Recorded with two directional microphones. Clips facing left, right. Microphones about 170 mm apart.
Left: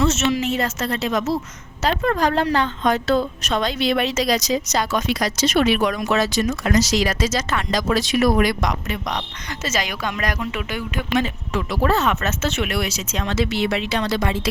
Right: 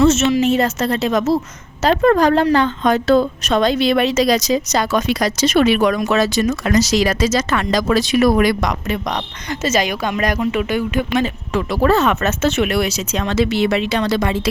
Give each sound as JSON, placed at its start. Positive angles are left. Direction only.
{"t": 0.0, "sound": "a woman's voice", "side_deg": -25}
{"t": 1.9, "sound": "speech", "side_deg": -55}
{"t": 2.2, "sound": "a woman's voice", "side_deg": -70}
{"t": 9.5, "sound": "a woman's voice", "side_deg": -20}
{"t": 10.3, "sound": "speech", "side_deg": -30}
{"t": 11.5, "sound": "speech", "side_deg": -75}
{"t": 12.6, "sound": "speech", "side_deg": -30}
{"t": 13.1, "sound": "speech", "side_deg": -65}